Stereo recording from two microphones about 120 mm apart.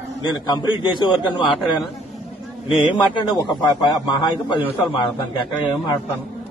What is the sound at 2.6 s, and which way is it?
A man's voice, 40° left (ahead or behind).